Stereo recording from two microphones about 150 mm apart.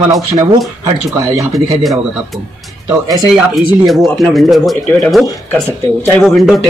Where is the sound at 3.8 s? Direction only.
Centre (ahead or behind).